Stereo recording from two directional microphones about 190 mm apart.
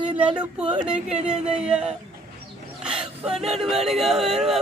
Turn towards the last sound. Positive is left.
turn(degrees=0)  # may be behind; listen again after turning